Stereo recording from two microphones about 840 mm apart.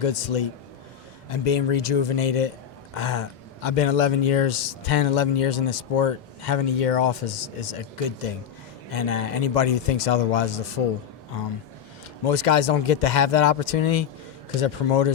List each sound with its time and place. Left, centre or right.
0.0 s speech: left
12.2 s speech: left